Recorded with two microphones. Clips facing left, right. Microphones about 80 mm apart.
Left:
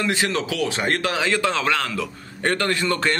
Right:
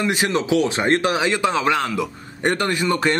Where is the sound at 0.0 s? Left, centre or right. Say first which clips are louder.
Right 2 dB; centre.